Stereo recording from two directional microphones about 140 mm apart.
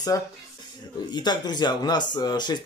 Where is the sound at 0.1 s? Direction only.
25° left (ahead or behind).